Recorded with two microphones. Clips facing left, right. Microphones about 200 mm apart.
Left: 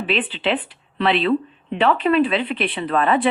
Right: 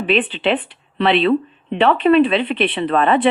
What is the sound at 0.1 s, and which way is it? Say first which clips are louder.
Speech: right 5 dB; 60° right (ahead or behind).